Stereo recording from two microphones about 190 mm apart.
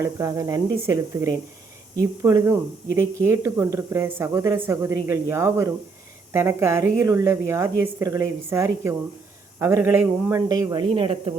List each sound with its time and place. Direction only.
0.0 s speech: 15° right (ahead or behind)